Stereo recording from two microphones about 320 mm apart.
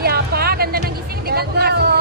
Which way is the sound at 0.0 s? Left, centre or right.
Right.